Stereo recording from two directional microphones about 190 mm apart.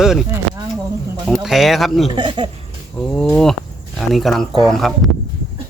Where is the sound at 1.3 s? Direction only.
Centre (ahead or behind).